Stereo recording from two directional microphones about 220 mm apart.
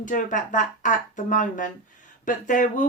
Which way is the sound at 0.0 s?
35° left (ahead or behind).